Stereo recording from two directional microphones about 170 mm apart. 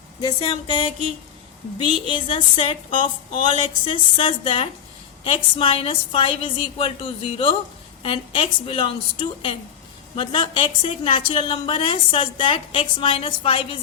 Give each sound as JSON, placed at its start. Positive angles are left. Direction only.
{"t": 0.4, "sound": "a woman's voice", "side_deg": 30}